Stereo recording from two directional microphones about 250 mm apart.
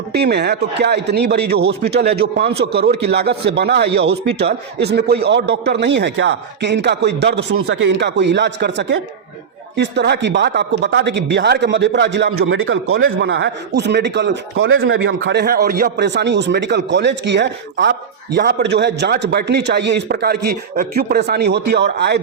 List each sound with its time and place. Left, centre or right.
0.1 s a man's voice: right